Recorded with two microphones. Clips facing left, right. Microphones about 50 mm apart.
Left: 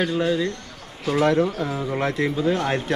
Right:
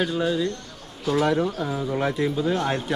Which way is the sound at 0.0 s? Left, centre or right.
Centre.